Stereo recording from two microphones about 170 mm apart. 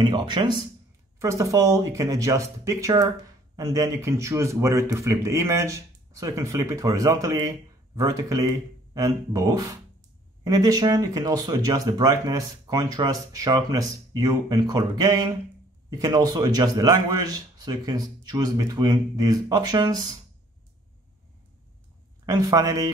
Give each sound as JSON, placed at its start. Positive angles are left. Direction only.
{"t": 0.0, "sound": "a man's voice", "side_deg": -30}
{"t": 22.2, "sound": "speech", "side_deg": -20}